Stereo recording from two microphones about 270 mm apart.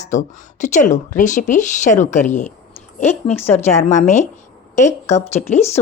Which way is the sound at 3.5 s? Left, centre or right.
Left.